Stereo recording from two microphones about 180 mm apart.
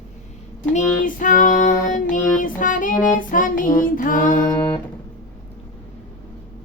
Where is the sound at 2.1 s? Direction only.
45° left (ahead or behind).